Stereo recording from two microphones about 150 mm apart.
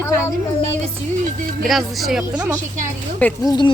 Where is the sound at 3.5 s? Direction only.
30° left (ahead or behind).